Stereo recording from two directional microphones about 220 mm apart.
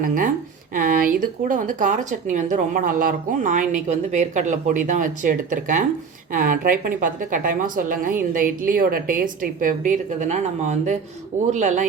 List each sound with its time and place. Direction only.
0.0 s speech: 40° right (ahead or behind)